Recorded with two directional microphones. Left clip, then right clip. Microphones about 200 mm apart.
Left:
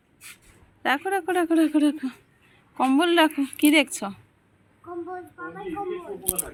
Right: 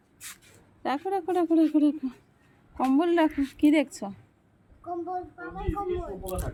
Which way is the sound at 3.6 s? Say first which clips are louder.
Left 4 dB; 5° left (ahead or behind).